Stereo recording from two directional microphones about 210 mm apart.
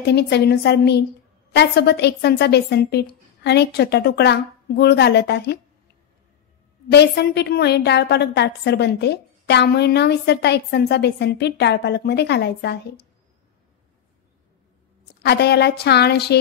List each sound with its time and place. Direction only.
0.0 s a woman's voice: 50° left (ahead or behind)
6.9 s a woman's voice: 50° left (ahead or behind)
15.2 s a woman's voice: 50° left (ahead or behind)